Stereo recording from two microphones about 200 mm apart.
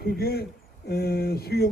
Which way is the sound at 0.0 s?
50° left (ahead or behind).